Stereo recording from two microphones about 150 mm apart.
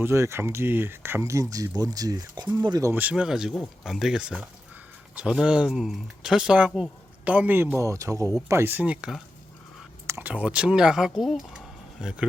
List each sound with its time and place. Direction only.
0.0 s speech: 20° right (ahead or behind)
2.9 s speech: 10° right (ahead or behind)